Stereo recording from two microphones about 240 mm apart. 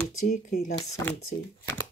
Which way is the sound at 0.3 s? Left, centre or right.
Left.